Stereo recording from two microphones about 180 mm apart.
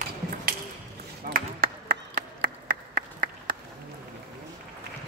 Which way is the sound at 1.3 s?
55° right (ahead or behind).